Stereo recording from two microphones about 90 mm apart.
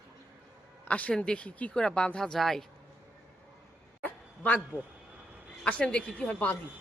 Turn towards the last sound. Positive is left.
turn(degrees=15)  # may be behind; listen again after turning